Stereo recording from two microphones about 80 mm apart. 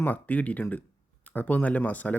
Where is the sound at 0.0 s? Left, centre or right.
Left.